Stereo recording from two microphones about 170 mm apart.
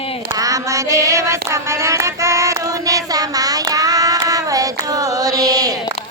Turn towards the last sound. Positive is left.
turn(degrees=-20)  # may be behind; listen again after turning